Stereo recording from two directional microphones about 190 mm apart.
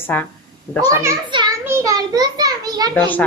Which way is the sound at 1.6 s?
15° right (ahead or behind).